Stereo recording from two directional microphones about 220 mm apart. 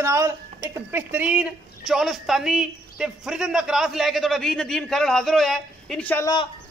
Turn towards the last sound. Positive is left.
turn(degrees=10)  # may be behind; listen again after turning